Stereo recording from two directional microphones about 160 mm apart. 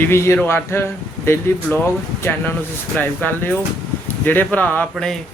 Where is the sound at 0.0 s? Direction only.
15° left (ahead or behind).